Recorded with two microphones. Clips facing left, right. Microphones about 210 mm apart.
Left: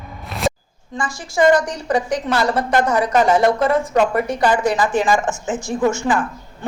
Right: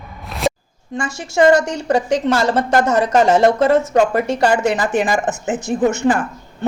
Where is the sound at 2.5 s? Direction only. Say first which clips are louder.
Right 2 dB; 45° right (ahead or behind).